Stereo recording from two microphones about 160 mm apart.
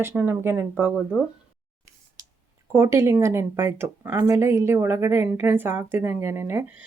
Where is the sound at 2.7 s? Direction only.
15° right (ahead or behind).